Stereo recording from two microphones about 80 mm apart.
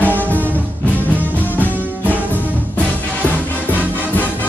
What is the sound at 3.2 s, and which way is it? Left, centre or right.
Music, left.